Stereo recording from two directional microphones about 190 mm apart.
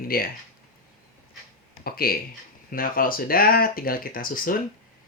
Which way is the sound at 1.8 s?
50° left (ahead or behind).